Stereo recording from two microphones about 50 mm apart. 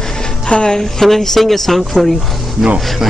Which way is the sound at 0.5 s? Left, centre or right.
Left.